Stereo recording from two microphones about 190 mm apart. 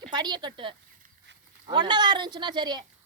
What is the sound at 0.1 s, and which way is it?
A woman's voice, 20° right (ahead or behind).